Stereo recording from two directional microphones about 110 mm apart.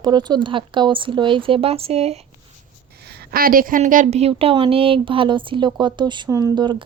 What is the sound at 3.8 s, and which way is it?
Speech, 90° right.